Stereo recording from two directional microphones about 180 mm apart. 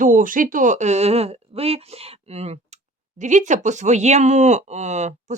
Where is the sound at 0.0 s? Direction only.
45° right (ahead or behind).